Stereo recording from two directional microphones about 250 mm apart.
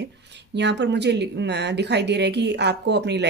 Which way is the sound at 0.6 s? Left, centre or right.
Right.